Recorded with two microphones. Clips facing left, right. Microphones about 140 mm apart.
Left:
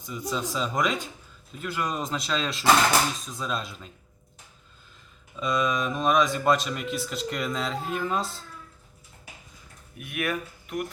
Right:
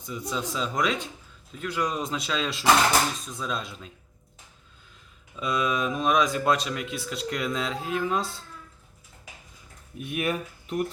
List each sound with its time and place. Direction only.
0.0 s speech: centre (ahead or behind)
5.4 s speech: 5° right (ahead or behind)
10.0 s speech: 25° right (ahead or behind)